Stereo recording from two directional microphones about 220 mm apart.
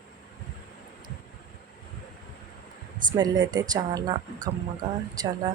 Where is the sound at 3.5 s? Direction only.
15° right (ahead or behind).